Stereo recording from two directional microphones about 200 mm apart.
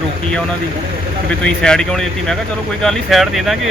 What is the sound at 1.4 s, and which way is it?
Speech, 5° left (ahead or behind).